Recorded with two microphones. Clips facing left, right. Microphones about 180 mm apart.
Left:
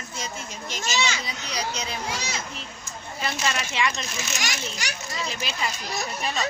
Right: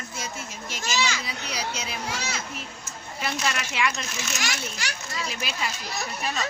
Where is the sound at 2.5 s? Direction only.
10° right (ahead or behind).